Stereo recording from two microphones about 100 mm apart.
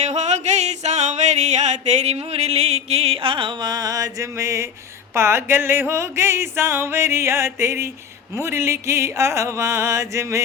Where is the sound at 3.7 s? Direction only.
35° right (ahead or behind).